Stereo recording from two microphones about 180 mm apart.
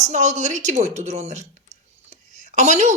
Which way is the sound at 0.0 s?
40° right (ahead or behind).